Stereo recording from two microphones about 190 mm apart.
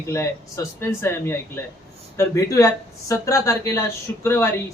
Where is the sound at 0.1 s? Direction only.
15° left (ahead or behind).